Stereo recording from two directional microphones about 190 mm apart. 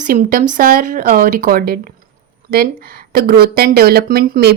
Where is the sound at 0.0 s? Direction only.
45° right (ahead or behind).